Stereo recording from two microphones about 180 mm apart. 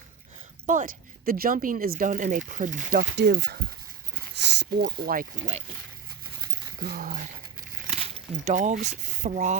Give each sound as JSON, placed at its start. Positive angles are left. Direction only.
{"t": 0.6, "sound": "speech", "side_deg": -45}
{"t": 6.8, "sound": "speech", "side_deg": -50}
{"t": 8.4, "sound": "speech", "side_deg": -45}